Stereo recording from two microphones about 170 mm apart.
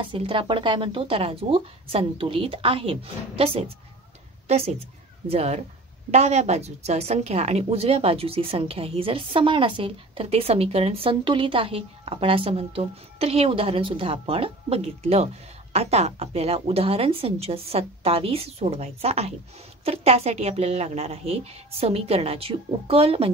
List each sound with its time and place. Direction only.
0.0 s a woman's voice: 30° right (ahead or behind)